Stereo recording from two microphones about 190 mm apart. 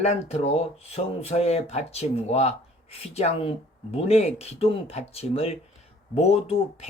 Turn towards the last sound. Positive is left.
turn(degrees=35)  # may be behind; listen again after turning